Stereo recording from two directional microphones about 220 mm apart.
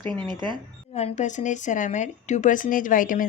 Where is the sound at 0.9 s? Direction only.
30° left (ahead or behind).